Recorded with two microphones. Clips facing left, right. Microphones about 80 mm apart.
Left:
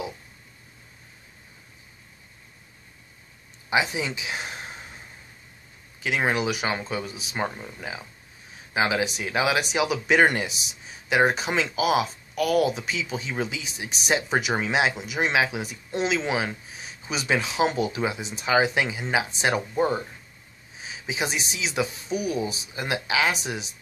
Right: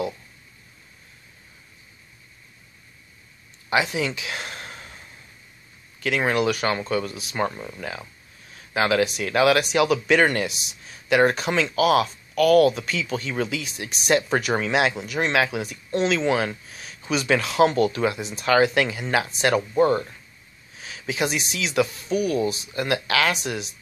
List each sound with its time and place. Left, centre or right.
3.9 s speech: centre
6.0 s speech: centre
20.7 s a sound: centre
21.8 s speech: centre